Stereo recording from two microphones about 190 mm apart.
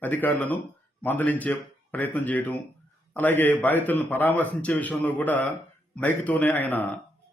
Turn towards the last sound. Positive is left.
turn(degrees=10)  # may be behind; listen again after turning